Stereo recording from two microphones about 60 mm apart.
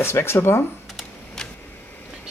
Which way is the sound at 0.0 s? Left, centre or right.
Left.